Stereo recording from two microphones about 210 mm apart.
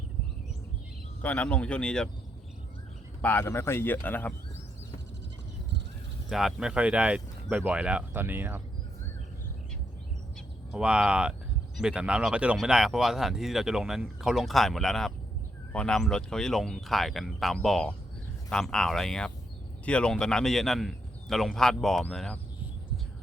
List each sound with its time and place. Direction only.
1.2 s speech: 5° left (ahead or behind)
3.2 s speech: 10° left (ahead or behind)
6.2 s speech: centre (ahead or behind)
10.7 s speech: 5° right (ahead or behind)